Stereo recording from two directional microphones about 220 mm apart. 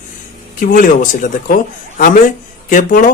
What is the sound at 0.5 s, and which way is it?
Speech, 40° left (ahead or behind).